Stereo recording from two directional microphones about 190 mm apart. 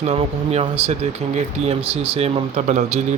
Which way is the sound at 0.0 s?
35° right (ahead or behind).